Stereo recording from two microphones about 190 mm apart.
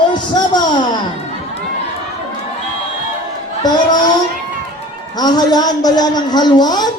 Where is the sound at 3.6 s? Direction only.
20° left (ahead or behind).